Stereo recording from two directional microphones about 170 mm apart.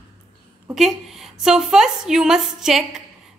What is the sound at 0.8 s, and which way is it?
Speech, centre (ahead or behind).